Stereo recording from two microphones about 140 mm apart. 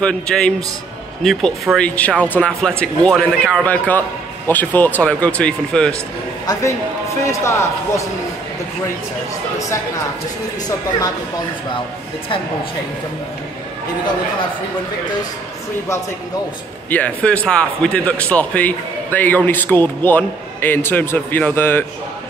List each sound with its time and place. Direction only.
0.0 s a man's voice: 5° left (ahead or behind)
6.4 s a man's voice: 25° left (ahead or behind)
16.9 s speech: 10° left (ahead or behind)